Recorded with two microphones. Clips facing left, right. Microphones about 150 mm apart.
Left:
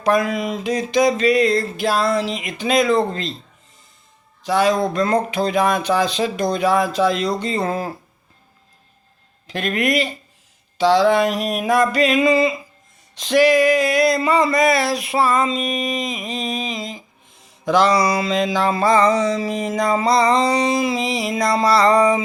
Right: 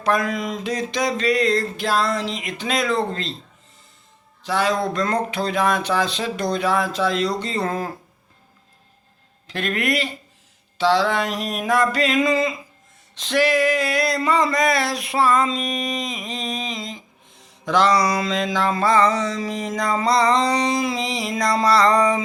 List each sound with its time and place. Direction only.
0.0 s mantra: 15° left (ahead or behind)
4.4 s mantra: 15° left (ahead or behind)
9.5 s mantra: 15° left (ahead or behind)